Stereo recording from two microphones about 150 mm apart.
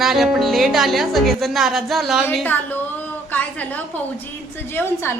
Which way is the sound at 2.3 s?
10° left (ahead or behind).